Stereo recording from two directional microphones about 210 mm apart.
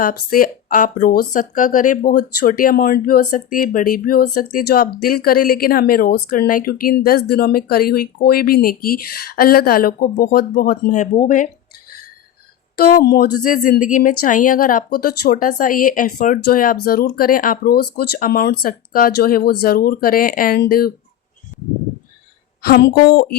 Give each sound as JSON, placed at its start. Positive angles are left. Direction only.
{"t": 0.0, "sound": "speech", "side_deg": 40}
{"t": 12.7, "sound": "speech", "side_deg": 45}
{"t": 22.6, "sound": "speech", "side_deg": 50}